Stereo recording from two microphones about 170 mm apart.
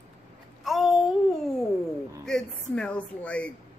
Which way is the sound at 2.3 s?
5° left (ahead or behind).